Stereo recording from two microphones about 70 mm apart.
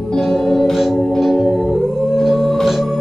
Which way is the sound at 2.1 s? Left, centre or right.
Centre.